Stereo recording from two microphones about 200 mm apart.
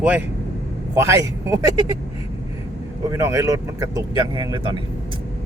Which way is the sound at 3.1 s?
15° right (ahead or behind).